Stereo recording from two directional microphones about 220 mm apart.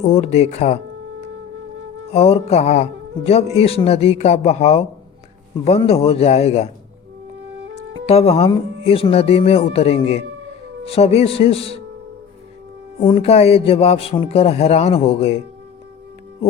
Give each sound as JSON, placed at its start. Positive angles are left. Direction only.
{"t": 0.1, "sound": "speech", "side_deg": 30}
{"t": 2.1, "sound": "speech", "side_deg": 30}
{"t": 7.9, "sound": "speech", "side_deg": 25}
{"t": 13.0, "sound": "speech", "side_deg": 30}